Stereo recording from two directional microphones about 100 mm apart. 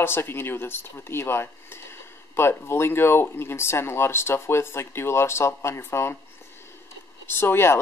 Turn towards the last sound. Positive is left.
turn(degrees=25)  # may be behind; listen again after turning